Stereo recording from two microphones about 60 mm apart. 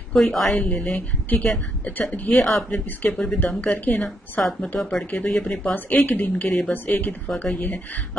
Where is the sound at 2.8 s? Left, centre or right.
Left.